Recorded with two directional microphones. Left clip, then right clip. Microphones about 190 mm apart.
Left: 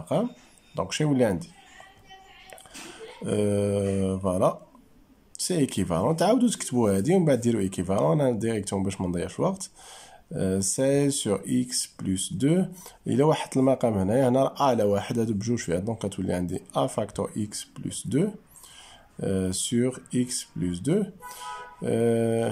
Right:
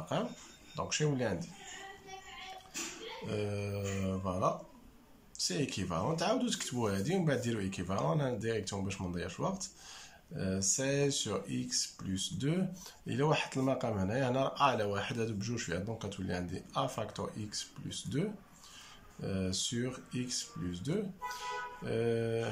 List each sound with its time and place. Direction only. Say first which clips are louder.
0.0 s speech: left 9 dB; 30° left (ahead or behind)
3.3 s speech: left 14 dB; 40° left (ahead or behind)